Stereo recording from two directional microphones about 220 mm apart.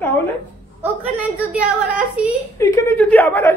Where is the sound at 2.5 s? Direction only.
15° left (ahead or behind).